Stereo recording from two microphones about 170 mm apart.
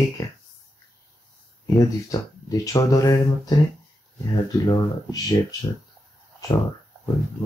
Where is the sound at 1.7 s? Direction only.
20° left (ahead or behind).